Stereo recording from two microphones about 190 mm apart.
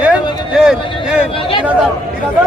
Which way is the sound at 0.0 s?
5° right (ahead or behind).